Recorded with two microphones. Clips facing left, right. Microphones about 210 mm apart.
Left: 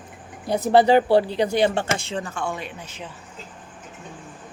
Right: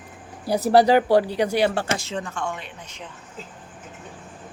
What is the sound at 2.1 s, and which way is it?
Speech, 5° left (ahead or behind).